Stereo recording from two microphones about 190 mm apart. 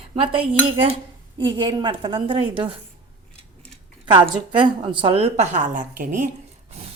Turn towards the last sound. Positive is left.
turn(degrees=-45)  # may be behind; listen again after turning